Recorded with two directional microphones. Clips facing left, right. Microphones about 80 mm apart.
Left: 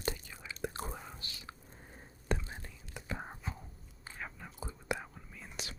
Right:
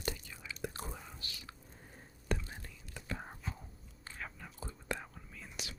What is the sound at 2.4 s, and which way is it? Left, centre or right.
Whispering, left.